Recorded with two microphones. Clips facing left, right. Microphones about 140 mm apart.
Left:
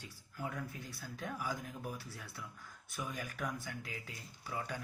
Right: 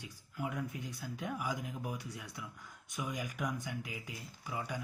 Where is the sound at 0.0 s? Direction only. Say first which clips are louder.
Right 3 dB; 15° right (ahead or behind).